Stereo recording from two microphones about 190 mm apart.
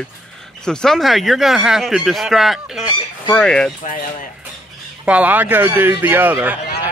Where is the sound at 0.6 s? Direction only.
5° left (ahead or behind).